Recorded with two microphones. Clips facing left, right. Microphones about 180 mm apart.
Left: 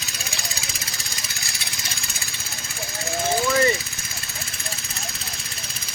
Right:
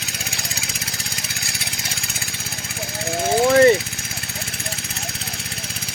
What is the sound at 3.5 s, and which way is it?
Vehicle, 60° right (ahead or behind).